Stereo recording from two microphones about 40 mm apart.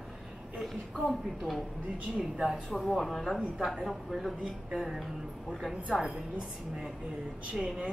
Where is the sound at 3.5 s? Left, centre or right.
Centre.